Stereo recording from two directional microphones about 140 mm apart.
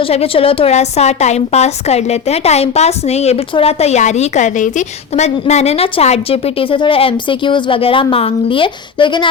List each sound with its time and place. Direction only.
0.0 s a woman's voice: 45° left (ahead or behind)